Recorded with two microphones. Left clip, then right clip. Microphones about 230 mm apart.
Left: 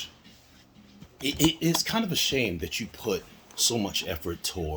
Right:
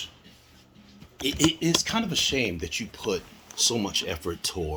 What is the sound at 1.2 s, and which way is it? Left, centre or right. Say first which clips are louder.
Speech: right 1 dB; centre.